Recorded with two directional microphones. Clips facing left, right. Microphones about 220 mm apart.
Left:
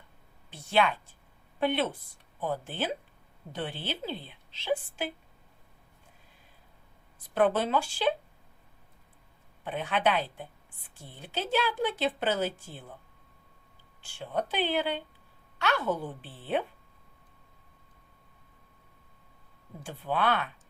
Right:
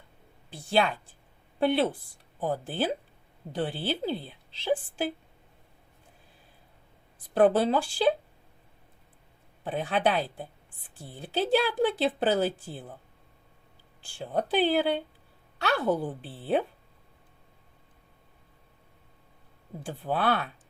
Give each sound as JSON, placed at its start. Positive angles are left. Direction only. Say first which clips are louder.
{"t": 0.5, "sound": "a woman's voice", "louder": "right 1 dB", "side_deg": -35}
{"t": 7.3, "sound": "a woman's voice", "louder": "right 4 dB", "side_deg": -35}
{"t": 9.6, "sound": "a woman's voice", "louder": "right 2 dB", "side_deg": -35}
{"t": 14.0, "sound": "a woman's voice", "louder": "right 2 dB", "side_deg": -35}
{"t": 19.8, "sound": "a woman's voice", "louder": "right 1 dB", "side_deg": -40}